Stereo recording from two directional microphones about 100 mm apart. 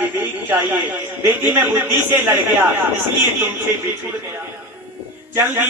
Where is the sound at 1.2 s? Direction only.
20° right (ahead or behind).